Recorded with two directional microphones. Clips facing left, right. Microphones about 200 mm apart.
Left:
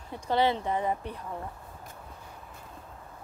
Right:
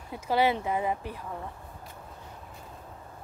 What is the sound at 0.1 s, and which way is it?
Speech, 10° right (ahead or behind).